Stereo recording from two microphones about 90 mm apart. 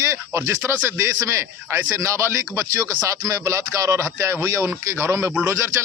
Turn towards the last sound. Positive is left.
turn(degrees=-30)  # may be behind; listen again after turning